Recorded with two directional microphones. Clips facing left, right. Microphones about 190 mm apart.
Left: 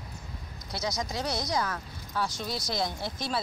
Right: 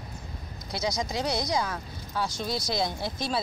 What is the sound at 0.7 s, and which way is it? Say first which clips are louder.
Speech: right 3 dB; 15° right (ahead or behind).